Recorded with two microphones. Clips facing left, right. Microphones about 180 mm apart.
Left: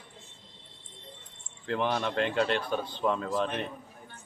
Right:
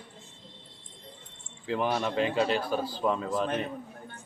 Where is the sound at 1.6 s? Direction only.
5° right (ahead or behind).